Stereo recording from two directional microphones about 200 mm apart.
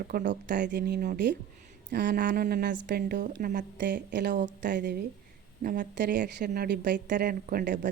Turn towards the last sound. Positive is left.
turn(degrees=-45)  # may be behind; listen again after turning